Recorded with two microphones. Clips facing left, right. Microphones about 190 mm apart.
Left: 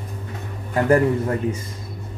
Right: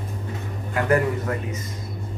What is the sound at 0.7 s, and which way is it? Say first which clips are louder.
Speech: left 4 dB; 30° left (ahead or behind).